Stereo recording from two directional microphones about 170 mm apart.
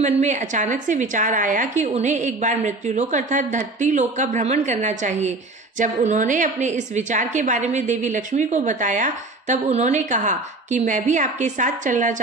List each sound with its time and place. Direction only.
0.0 s a woman's voice: 45° right (ahead or behind)